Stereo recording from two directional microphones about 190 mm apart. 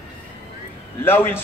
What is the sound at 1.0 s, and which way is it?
Speech, 10° left (ahead or behind).